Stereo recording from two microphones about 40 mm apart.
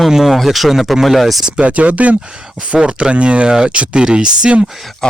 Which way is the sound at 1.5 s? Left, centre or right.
Right.